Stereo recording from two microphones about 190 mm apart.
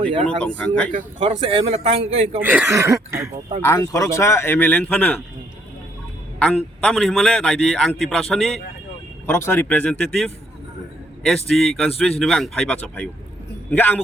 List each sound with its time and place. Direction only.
0.0 s speech: 30° right (ahead or behind)
0.4 s speech: 5° left (ahead or behind)
1.3 s speech: 30° right (ahead or behind)
2.4 s speech: 10° right (ahead or behind)
3.6 s speech: 15° left (ahead or behind)
6.8 s a man's voice: 5° left (ahead or behind)
9.2 s a man's voice: 15° left (ahead or behind)